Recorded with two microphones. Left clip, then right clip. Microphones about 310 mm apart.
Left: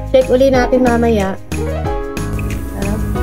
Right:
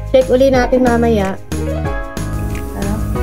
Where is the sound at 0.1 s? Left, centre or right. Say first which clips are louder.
Even; centre.